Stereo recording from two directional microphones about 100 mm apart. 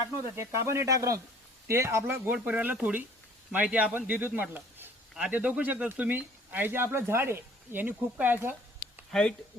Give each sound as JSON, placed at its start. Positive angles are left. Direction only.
{"t": 0.3, "sound": "speech", "side_deg": -30}
{"t": 9.1, "sound": "speech", "side_deg": 5}